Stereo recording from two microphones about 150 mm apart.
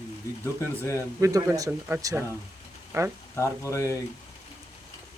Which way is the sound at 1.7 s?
10° right (ahead or behind).